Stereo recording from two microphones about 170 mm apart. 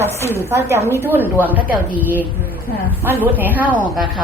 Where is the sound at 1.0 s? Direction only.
10° right (ahead or behind).